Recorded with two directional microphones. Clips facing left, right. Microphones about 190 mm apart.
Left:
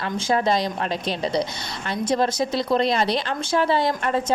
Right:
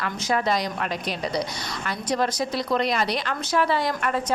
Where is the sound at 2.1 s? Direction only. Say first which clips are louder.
Left 3 dB; 25° left (ahead or behind).